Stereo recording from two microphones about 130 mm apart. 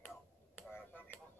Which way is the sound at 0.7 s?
15° left (ahead or behind).